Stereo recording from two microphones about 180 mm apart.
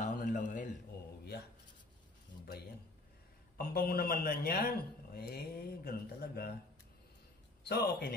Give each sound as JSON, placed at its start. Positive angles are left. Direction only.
{"t": 0.0, "sound": "a sound", "side_deg": 45}
{"t": 3.5, "sound": "a man's voice", "side_deg": 60}
{"t": 7.6, "sound": "a man's voice", "side_deg": 65}